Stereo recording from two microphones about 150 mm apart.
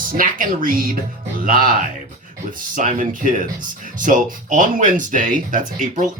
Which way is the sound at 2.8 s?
55° right (ahead or behind).